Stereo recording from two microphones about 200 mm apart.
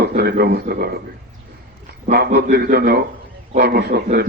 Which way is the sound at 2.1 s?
55° right (ahead or behind).